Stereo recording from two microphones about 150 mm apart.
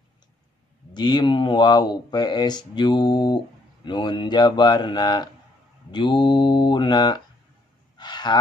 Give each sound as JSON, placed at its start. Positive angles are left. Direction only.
{"t": 0.9, "sound": "speech", "side_deg": 30}
{"t": 8.0, "sound": "sigh", "side_deg": 30}